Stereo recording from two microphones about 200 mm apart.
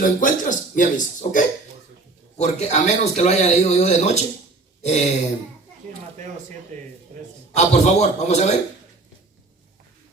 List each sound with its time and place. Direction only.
0.0 s speech: 40° left (ahead or behind)
7.5 s speech: 35° left (ahead or behind)